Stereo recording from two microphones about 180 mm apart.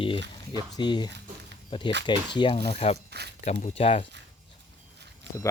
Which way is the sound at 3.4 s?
35° left (ahead or behind).